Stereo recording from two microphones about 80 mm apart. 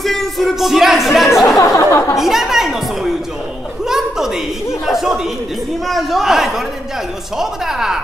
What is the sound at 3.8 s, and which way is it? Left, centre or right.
Chuckle, centre.